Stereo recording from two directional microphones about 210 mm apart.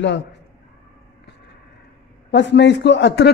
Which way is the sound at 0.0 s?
55° left (ahead or behind).